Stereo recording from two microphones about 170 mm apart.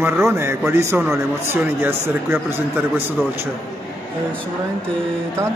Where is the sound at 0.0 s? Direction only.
15° right (ahead or behind).